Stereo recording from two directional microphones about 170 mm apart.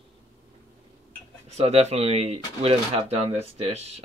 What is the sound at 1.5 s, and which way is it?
Speech, 40° right (ahead or behind).